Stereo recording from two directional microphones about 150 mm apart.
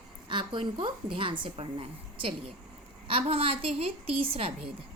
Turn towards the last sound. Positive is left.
turn(degrees=-40)  # may be behind; listen again after turning